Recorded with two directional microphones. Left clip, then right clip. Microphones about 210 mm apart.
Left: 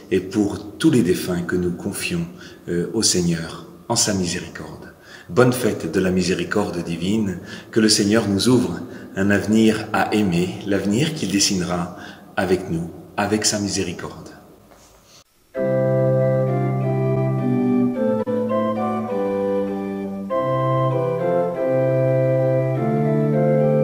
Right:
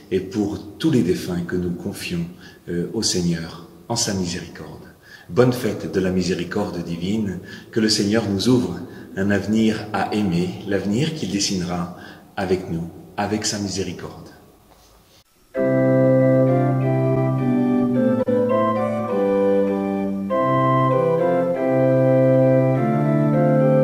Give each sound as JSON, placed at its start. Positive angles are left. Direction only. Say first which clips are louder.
{"t": 0.1, "sound": "a man's voice", "louder": "left 2 dB", "side_deg": 10}
{"t": 15.5, "sound": "organ", "louder": "right 1 dB", "side_deg": 0}